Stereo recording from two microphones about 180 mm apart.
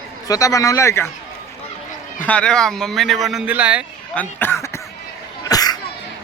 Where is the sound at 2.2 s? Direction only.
5° left (ahead or behind).